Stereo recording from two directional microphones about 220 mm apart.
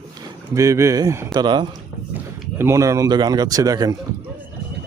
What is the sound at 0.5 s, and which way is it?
Speech, 15° right (ahead or behind).